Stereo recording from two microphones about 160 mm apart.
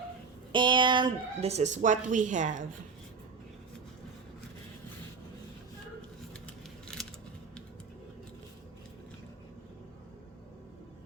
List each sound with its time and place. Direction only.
0.5 s a woman's voice: 30° right (ahead or behind); by 2.6 s 50° right (ahead or behind)
6.8 s scissors: 5° left (ahead or behind)